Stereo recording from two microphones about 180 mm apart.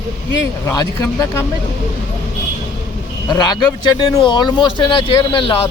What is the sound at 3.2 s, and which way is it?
Speech, 25° left (ahead or behind).